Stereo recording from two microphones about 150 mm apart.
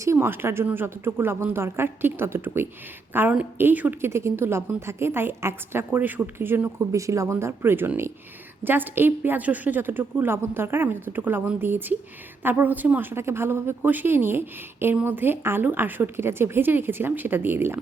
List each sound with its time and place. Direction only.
0.0 s speech: 15° right (ahead or behind)